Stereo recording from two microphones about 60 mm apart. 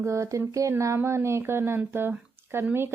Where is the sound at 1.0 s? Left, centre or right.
Right.